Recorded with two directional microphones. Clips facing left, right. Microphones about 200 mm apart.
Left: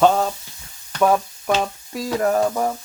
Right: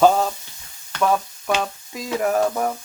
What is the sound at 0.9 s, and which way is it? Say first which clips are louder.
Sizzle: left 3 dB; 10° left (ahead or behind).